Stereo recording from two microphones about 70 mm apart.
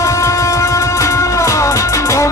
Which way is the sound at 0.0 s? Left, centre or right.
Left.